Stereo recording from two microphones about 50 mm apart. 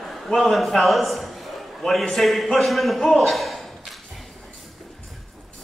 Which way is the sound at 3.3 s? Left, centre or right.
Centre.